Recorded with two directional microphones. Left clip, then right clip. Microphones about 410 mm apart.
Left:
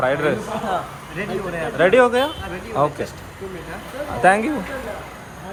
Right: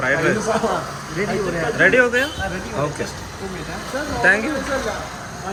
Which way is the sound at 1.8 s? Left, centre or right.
Centre.